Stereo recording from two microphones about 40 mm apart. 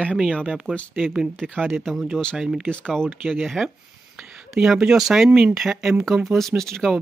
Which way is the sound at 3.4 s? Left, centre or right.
Centre.